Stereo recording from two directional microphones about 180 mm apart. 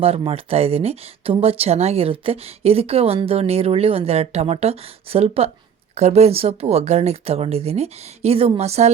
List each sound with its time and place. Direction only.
0.0 s speech: 35° right (ahead or behind)